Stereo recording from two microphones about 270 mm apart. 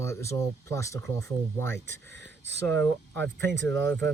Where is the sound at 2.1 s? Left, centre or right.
Right.